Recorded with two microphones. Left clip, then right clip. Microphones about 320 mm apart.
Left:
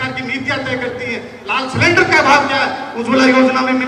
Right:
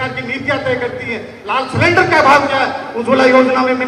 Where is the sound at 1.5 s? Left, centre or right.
Centre.